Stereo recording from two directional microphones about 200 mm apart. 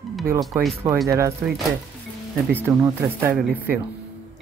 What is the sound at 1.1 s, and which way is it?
Speech, 15° right (ahead or behind).